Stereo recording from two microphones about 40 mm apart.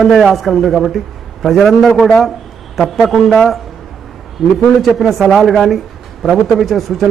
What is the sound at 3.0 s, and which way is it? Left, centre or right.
Speech, centre.